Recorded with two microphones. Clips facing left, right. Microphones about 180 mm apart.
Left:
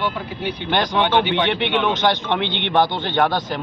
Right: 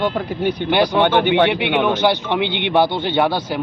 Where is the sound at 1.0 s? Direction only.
50° right (ahead or behind).